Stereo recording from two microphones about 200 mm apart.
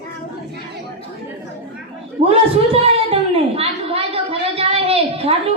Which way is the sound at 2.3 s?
30° right (ahead or behind).